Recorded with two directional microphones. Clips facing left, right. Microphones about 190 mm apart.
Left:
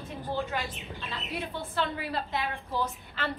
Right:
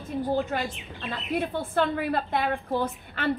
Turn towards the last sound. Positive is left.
turn(degrees=-55)  # may be behind; listen again after turning